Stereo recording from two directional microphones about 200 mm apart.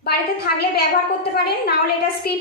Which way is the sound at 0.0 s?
50° left (ahead or behind).